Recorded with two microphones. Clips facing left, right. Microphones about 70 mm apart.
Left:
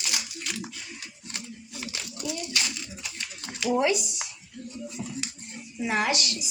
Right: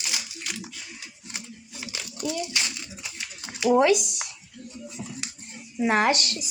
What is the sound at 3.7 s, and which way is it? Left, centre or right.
Speech, right.